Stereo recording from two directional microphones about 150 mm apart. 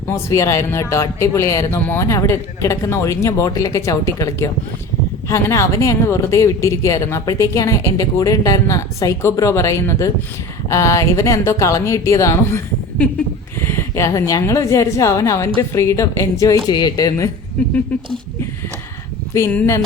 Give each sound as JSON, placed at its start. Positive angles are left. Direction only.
{"t": 0.1, "sound": "a woman's voice", "side_deg": 20}
{"t": 19.3, "sound": "speech", "side_deg": 15}